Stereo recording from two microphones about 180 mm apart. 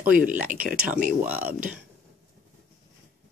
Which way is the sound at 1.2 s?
10° right (ahead or behind).